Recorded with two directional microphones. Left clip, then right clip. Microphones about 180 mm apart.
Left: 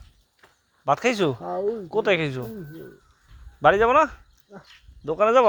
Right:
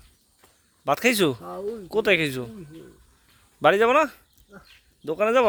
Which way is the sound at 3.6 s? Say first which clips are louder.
Left 1 dB; 45° right (ahead or behind).